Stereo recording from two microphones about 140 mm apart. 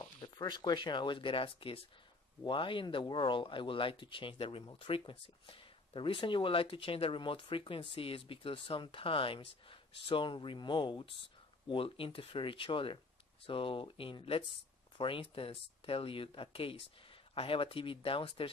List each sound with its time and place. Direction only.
0.2 s speech: 30° left (ahead or behind)